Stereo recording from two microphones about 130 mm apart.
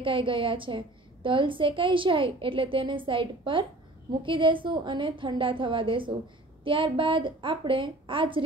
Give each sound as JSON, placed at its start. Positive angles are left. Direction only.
{"t": 0.0, "sound": "a woman's voice", "side_deg": -40}